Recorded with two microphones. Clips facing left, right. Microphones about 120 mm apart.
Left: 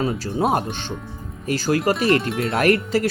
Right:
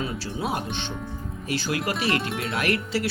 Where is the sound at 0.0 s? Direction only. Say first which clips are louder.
Left 8 dB; 45° left (ahead or behind).